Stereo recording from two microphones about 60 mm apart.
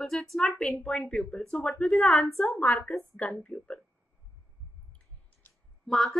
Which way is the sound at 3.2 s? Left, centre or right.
Left.